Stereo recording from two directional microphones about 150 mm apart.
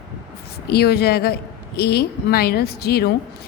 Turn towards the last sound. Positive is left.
turn(degrees=90)